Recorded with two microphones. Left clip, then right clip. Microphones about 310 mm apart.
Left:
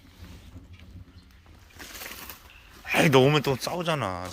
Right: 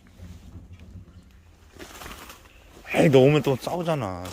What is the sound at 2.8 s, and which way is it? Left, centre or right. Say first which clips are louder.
Speech: right 2 dB; centre.